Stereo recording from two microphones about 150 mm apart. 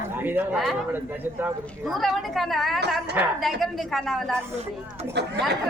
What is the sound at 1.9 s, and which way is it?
A woman's voice, centre (ahead or behind).